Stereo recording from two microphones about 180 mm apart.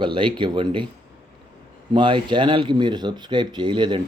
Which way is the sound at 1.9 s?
25° right (ahead or behind).